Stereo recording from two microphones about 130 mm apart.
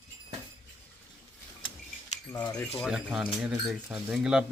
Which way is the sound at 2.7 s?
Centre (ahead or behind).